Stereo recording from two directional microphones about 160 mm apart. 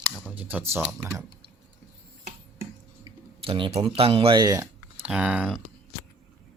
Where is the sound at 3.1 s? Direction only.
30° right (ahead or behind).